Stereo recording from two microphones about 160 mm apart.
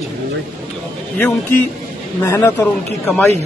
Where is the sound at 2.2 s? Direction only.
15° left (ahead or behind).